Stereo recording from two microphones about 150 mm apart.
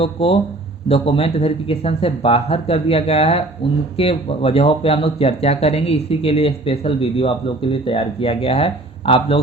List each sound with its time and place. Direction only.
0.0 s speech: 40° left (ahead or behind)